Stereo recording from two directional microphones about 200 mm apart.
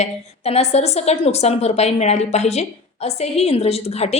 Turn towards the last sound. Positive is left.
turn(degrees=30)  # may be behind; listen again after turning